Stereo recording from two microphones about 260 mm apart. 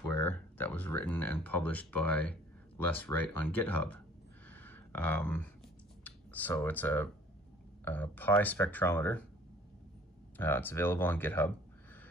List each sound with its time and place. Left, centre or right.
0.1 s speech: centre
4.5 s a sound: centre
6.0 s speech: centre
10.3 s speech: centre